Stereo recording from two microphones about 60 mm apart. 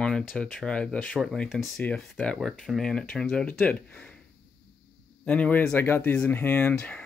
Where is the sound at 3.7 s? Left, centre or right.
Centre.